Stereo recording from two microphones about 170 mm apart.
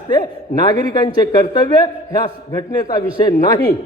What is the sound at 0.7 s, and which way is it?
A man's voice, 25° left (ahead or behind).